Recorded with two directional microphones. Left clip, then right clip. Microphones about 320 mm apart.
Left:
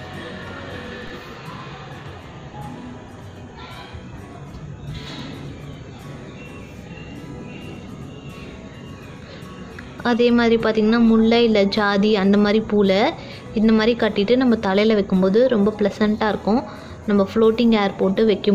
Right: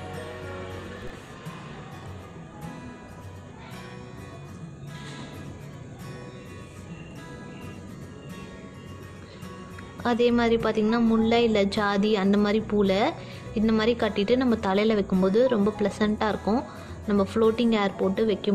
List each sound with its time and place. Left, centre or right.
10.0 s a woman's voice: centre